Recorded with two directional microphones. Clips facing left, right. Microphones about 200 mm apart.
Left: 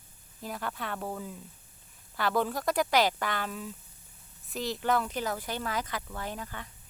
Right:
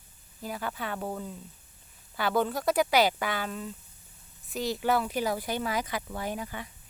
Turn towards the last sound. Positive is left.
turn(degrees=-10)  # may be behind; listen again after turning